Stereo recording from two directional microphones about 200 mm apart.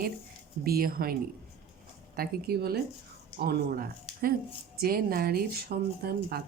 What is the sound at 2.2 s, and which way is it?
Speech, 50° right (ahead or behind).